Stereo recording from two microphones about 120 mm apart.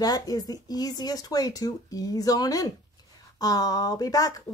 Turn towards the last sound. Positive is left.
turn(degrees=30)  # may be behind; listen again after turning